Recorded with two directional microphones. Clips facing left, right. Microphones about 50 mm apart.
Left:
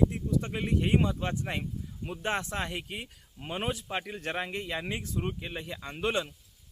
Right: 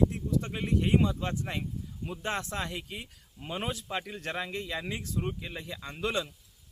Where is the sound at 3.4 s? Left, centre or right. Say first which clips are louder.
Left 2 dB; left.